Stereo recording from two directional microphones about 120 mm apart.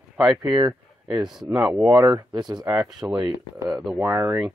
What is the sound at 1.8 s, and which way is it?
Speech, 30° right (ahead or behind).